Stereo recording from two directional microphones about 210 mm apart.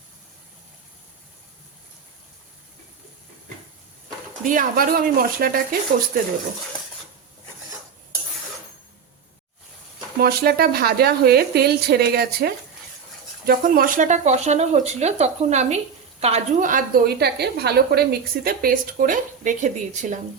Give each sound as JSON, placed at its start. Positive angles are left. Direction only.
{"t": 4.4, "sound": "a woman's voice", "side_deg": -40}
{"t": 10.2, "sound": "a woman's voice", "side_deg": -45}